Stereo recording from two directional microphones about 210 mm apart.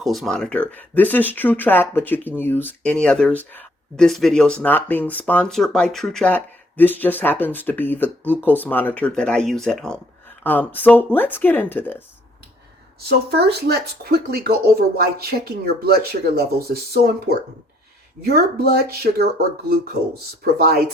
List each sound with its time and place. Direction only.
0.0 s speech: centre (ahead or behind)
13.1 s speech: 50° right (ahead or behind)